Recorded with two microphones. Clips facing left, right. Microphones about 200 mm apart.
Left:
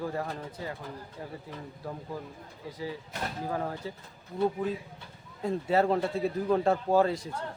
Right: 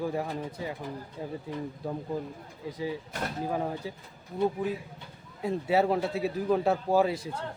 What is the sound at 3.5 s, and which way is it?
Speech, 15° right (ahead or behind).